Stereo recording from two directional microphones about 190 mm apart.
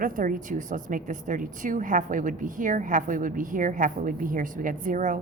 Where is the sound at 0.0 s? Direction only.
45° right (ahead or behind).